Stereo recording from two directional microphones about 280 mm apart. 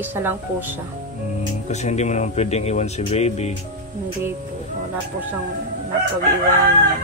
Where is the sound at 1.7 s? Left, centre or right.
Left.